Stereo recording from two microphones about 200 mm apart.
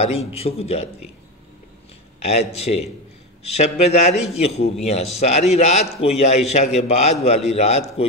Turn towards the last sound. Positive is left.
turn(degrees=30)  # may be behind; listen again after turning